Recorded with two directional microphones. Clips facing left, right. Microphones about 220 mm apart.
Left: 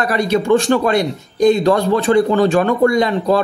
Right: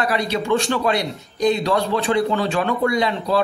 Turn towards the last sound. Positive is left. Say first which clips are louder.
# left 5 dB
turn(degrees=45)  # may be behind; listen again after turning